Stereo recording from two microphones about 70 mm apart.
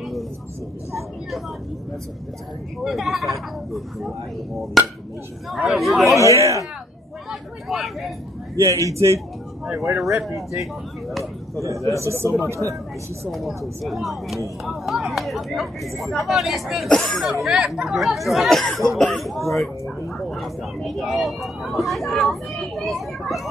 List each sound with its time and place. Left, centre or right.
2.8 s speech: centre
5.5 s speech: centre
6.3 s a man's voice: right
7.2 s speech: centre
8.5 s a man's voice: right
9.8 s speech: centre
11.5 s a man's voice: right
13.3 s speech: centre